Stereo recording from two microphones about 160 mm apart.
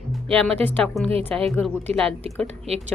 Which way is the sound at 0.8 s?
5° left (ahead or behind).